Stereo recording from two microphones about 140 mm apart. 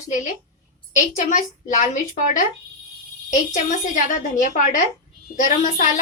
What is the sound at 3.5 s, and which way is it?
A woman's voice, 65° left (ahead or behind).